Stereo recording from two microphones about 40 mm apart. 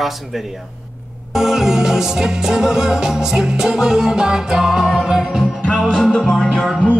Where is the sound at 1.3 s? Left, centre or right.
Centre.